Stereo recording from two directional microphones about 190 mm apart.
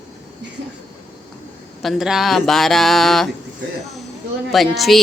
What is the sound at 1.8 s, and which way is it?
Speech, centre (ahead or behind).